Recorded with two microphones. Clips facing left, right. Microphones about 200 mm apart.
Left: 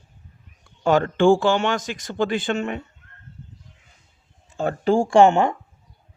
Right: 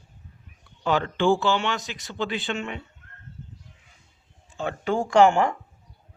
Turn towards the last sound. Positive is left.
turn(degrees=25)  # may be behind; listen again after turning